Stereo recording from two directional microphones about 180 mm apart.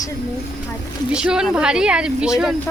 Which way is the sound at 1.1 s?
5° right (ahead or behind).